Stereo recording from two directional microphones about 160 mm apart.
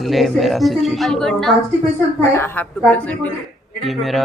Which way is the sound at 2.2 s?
15° left (ahead or behind).